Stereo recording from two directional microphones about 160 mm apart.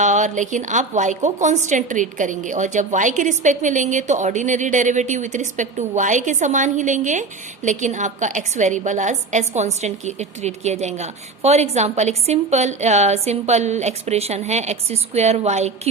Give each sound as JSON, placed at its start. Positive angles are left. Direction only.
{"t": 0.0, "sound": "a woman's voice", "side_deg": -50}